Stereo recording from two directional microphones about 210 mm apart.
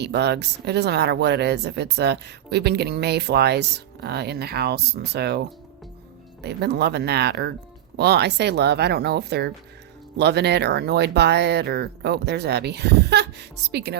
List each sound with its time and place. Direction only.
0.0 s speech: 55° right (ahead or behind)
6.4 s speech: 50° right (ahead or behind)